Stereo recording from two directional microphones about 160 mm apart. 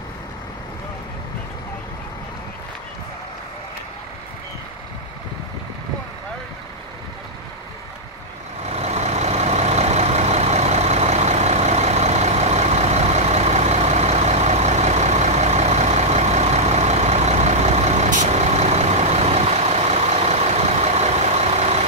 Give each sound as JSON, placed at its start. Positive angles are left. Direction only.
{"t": 8.6, "sound": "vehicle", "side_deg": -45}